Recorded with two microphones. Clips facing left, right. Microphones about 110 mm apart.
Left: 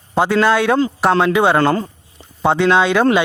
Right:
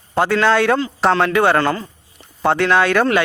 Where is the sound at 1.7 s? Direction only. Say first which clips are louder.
Left 7 dB; 35° left (ahead or behind).